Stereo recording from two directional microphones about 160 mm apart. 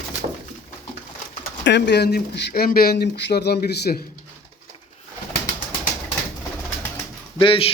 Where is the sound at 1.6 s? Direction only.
90° left.